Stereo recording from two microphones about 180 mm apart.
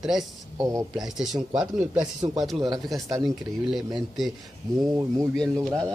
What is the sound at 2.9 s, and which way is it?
Speech, 20° right (ahead or behind).